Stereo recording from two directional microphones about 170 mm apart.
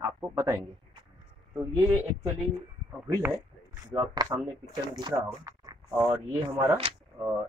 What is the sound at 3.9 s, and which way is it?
Speech, 20° right (ahead or behind).